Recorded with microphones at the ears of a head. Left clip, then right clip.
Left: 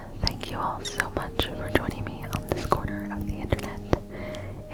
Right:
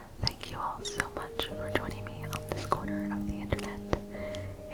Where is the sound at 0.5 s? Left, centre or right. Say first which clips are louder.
Left 7 dB; left.